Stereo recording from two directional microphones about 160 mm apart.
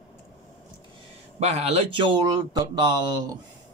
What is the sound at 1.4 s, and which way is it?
Speech, 40° right (ahead or behind).